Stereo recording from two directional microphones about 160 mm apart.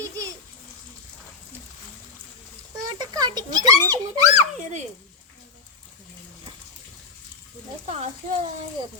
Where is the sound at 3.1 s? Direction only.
25° right (ahead or behind).